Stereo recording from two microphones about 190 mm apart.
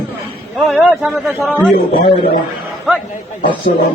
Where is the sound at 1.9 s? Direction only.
50° left (ahead or behind).